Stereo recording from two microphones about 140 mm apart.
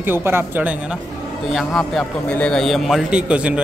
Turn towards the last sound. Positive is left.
turn(degrees=-10)  # may be behind; listen again after turning